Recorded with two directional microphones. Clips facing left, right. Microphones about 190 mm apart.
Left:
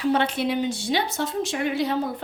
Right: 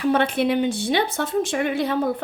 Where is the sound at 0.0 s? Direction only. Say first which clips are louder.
Right 3 dB; 55° right (ahead or behind).